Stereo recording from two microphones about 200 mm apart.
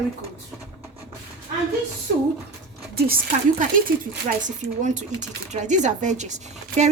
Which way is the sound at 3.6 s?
45° right (ahead or behind).